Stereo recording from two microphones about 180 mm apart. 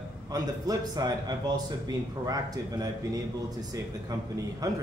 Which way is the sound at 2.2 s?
20° right (ahead or behind).